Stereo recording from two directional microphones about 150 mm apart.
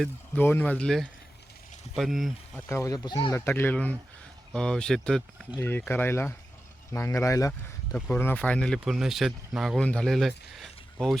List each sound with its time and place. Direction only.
0.3 s speech: 10° left (ahead or behind)
2.6 s speech: 20° left (ahead or behind)
3.4 s speech: 15° left (ahead or behind)
5.5 s speech: 15° left (ahead or behind)
7.9 s speech: 10° left (ahead or behind)